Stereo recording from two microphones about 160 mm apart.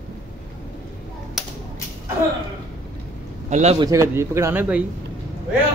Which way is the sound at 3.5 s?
40° right (ahead or behind).